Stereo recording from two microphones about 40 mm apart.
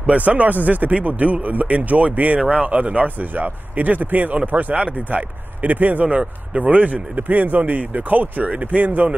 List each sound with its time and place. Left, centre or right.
0.0 s speech: right
6.0 s speech: right